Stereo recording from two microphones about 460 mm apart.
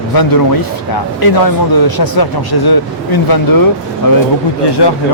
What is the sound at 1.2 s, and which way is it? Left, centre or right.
Speech, left.